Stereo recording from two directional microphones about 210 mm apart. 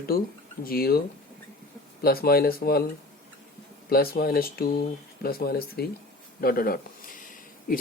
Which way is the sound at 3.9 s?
45° left (ahead or behind).